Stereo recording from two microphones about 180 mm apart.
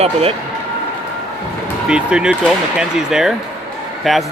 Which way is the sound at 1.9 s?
5° right (ahead or behind).